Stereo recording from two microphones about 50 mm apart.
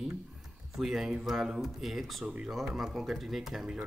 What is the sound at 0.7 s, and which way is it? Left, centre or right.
Speech, centre.